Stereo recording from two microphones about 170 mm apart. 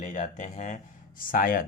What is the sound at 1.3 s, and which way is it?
Speech, 55° left (ahead or behind).